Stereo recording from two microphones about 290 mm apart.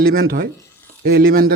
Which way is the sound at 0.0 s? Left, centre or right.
Right.